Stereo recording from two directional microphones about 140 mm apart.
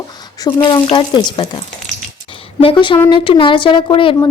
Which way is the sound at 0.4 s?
30° left (ahead or behind).